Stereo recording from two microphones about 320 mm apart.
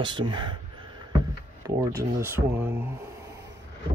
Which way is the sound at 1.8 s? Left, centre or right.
Centre.